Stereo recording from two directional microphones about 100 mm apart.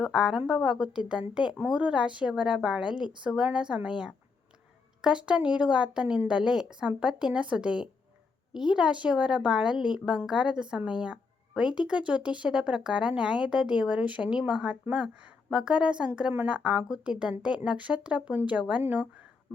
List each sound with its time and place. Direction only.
0.0 s speech: 5° right (ahead or behind)